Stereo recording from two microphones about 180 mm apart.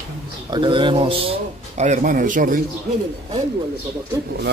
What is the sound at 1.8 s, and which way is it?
Speech, 45° right (ahead or behind).